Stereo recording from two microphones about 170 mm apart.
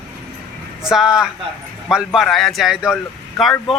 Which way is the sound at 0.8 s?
5° right (ahead or behind).